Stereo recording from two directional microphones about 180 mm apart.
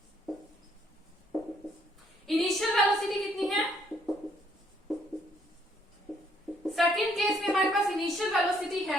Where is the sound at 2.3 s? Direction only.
Centre (ahead or behind).